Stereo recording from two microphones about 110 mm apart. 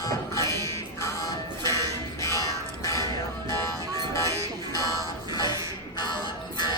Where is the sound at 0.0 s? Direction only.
30° left (ahead or behind).